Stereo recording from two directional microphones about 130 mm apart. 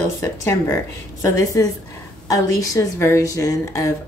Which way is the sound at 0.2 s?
25° left (ahead or behind).